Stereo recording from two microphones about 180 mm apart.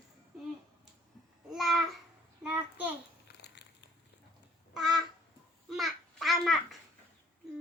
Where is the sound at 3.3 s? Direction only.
70° left (ahead or behind).